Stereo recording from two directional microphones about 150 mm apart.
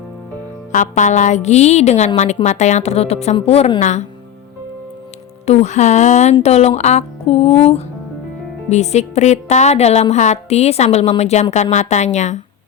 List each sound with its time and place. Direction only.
0.7 s a woman's voice: 55° left (ahead or behind)
5.5 s a woman's voice: 50° left (ahead or behind)